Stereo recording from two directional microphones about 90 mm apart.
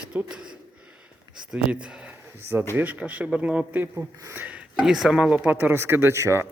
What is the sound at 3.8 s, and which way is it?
Speech, 25° right (ahead or behind).